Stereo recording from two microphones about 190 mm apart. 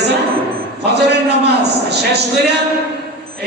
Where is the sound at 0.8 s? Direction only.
60° right (ahead or behind).